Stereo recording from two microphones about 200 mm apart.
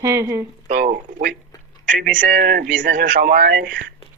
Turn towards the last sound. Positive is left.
turn(degrees=-45)  # may be behind; listen again after turning